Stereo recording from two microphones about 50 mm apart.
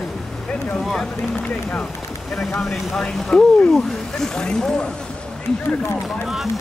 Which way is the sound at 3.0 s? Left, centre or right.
Centre.